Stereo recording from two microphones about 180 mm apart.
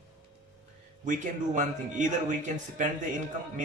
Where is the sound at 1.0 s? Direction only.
45° right (ahead or behind).